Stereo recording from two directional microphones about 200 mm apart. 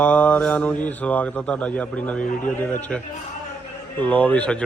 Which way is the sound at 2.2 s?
40° left (ahead or behind).